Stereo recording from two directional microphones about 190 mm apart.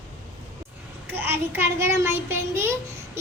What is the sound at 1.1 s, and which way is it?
A child's voice, 10° right (ahead or behind).